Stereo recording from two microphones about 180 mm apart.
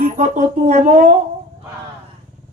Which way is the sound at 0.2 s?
40° right (ahead or behind).